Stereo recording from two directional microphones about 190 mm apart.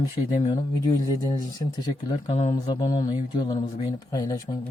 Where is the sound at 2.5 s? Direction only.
20° left (ahead or behind).